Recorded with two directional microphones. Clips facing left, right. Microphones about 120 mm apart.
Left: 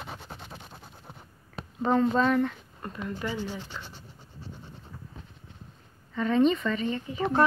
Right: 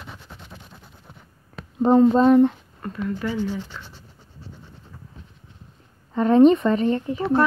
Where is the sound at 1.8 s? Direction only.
30° right (ahead or behind).